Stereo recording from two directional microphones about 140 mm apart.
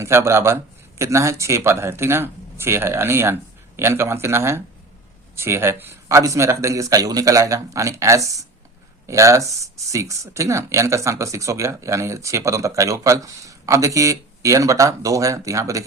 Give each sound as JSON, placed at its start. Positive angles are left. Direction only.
{"t": 0.0, "sound": "speech", "side_deg": -20}